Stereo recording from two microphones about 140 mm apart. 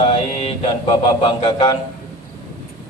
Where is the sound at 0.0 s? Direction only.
45° left (ahead or behind).